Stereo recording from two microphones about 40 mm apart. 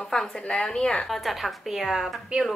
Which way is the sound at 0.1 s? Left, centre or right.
Centre.